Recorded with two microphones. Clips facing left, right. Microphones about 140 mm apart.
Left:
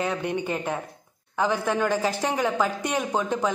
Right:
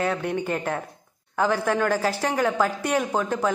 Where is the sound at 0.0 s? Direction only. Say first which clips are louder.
Right 2 dB; 15° left (ahead or behind).